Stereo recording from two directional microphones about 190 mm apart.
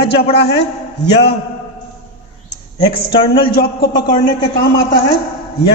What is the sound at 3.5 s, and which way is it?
Speech, 55° left (ahead or behind).